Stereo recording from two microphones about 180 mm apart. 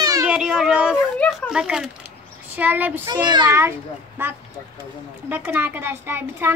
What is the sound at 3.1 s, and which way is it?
Speech, 20° right (ahead or behind).